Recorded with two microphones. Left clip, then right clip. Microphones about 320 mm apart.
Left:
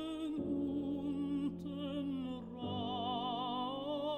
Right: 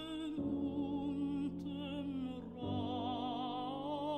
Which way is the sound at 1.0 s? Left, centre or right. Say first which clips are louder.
Left 1 dB; left.